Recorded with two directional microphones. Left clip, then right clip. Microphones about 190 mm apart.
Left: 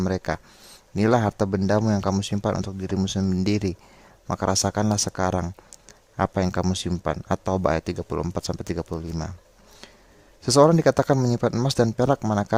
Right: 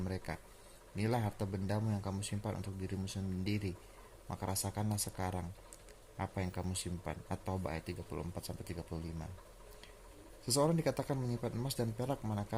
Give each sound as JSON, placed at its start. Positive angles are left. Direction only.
{"t": 0.0, "sound": "speech", "side_deg": 55}
{"t": 10.4, "sound": "speech", "side_deg": 55}